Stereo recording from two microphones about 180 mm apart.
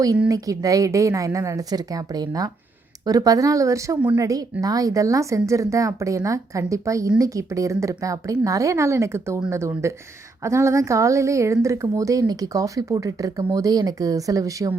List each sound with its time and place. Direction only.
0.3 s a woman's voice: 20° right (ahead or behind)